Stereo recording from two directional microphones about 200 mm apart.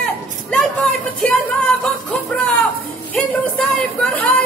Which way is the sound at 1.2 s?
5° left (ahead or behind).